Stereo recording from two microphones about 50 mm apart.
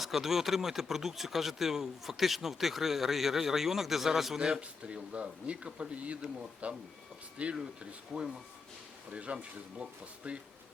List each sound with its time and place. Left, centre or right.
0.0 s speech: centre
4.4 s speech: centre
8.1 s speech: centre
9.1 s speech: right